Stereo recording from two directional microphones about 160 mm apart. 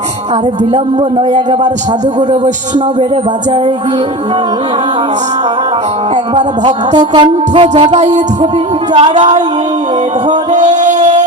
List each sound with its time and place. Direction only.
6.3 s a woman's voice: 25° right (ahead or behind)
7.9 s music: 45° right (ahead or behind)
8.9 s a woman's voice: 30° right (ahead or behind)
9.1 s music: 45° right (ahead or behind)
10.5 s music: 50° right (ahead or behind)